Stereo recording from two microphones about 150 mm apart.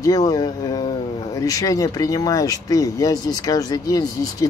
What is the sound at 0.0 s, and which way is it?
Speech, 25° left (ahead or behind).